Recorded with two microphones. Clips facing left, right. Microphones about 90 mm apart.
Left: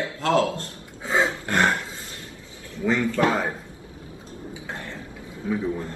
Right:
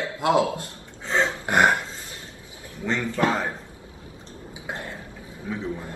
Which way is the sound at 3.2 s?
10° left (ahead or behind).